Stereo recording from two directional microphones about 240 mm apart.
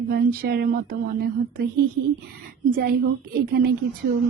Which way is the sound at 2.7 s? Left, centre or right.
Right.